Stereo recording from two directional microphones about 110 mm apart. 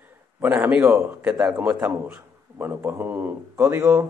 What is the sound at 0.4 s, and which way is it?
A man's voice, 15° right (ahead or behind).